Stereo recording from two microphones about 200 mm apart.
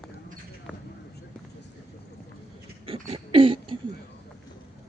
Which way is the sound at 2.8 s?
25° right (ahead or behind).